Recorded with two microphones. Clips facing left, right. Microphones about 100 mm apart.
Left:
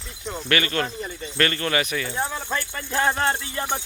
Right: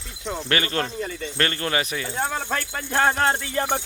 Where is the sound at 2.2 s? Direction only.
65° right (ahead or behind).